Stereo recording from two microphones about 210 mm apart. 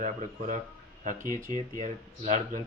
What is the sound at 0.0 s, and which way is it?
Speech, 35° right (ahead or behind).